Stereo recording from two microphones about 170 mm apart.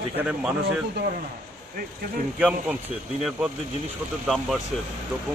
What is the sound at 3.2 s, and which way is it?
Speech, 10° right (ahead or behind).